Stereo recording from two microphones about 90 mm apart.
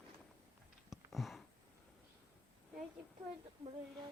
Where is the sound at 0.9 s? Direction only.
Centre (ahead or behind).